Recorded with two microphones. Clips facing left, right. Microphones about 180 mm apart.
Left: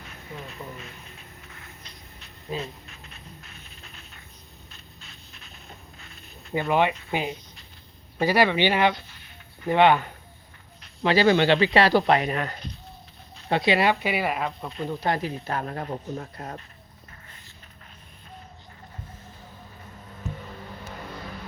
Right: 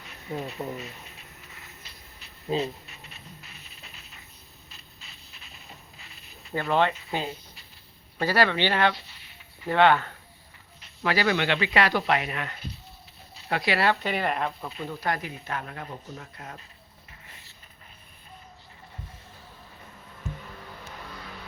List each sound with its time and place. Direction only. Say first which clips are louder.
0.6 s speech: right 5 dB; 40° right (ahead or behind)
1.5 s a sound: left 3 dB; 5° right (ahead or behind)
6.5 s speech: left 2 dB; 15° left (ahead or behind)
11.0 s speech: left 6 dB; 30° left (ahead or behind)
13.5 s speech: left 3 dB; 25° left (ahead or behind); by 14.8 s centre (ahead or behind)
14.8 s speech: left 4 dB; 25° left (ahead or behind)